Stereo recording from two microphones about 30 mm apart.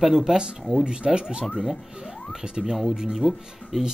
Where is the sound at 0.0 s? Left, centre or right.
Centre.